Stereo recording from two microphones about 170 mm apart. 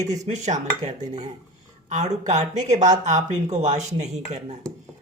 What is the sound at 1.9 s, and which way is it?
Speech, 45° right (ahead or behind).